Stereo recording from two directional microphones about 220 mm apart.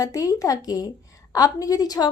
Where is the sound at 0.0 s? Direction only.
15° left (ahead or behind).